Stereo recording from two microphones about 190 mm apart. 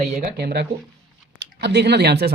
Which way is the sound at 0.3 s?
60° right (ahead or behind).